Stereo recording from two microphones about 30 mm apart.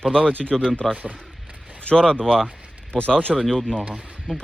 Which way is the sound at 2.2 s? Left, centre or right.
Centre.